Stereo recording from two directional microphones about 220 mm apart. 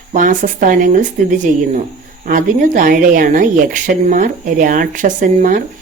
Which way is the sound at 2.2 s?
35° right (ahead or behind).